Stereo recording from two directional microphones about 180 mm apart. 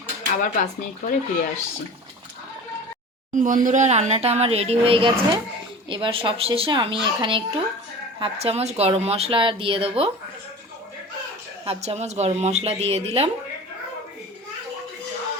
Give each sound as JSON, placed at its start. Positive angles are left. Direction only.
{"t": 0.4, "sound": "speech", "side_deg": 45}
{"t": 3.3, "sound": "a woman's voice", "side_deg": -45}
{"t": 11.6, "sound": "speech", "side_deg": -35}